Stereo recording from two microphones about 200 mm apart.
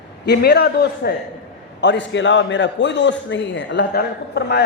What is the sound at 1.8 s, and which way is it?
A man's voice, 65° left (ahead or behind).